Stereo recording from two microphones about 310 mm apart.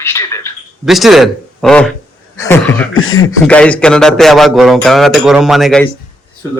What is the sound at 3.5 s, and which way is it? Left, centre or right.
Speech, centre.